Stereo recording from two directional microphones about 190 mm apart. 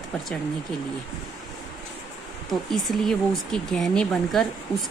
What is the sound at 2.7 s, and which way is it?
Speech, centre (ahead or behind).